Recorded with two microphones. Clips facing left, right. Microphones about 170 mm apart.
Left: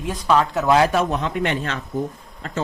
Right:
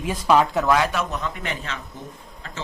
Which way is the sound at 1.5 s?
35° left (ahead or behind).